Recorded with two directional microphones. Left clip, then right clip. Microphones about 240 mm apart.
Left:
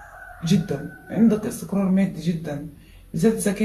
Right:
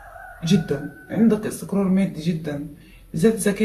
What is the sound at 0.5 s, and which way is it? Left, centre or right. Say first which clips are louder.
Speech: right 2 dB; centre.